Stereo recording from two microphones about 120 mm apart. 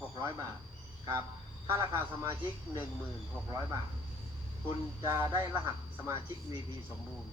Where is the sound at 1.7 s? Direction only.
20° right (ahead or behind).